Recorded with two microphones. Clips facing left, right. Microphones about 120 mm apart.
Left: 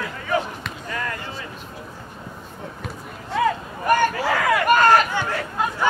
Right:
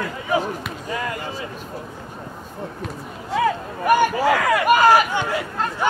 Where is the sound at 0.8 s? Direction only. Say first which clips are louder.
Right 2 dB; 15° right (ahead or behind).